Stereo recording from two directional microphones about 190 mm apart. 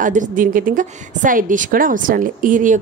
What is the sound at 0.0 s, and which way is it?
A woman's voice, 45° right (ahead or behind).